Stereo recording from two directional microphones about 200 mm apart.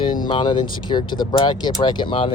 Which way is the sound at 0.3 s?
25° left (ahead or behind).